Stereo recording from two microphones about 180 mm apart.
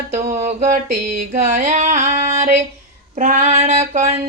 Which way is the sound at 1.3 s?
40° right (ahead or behind).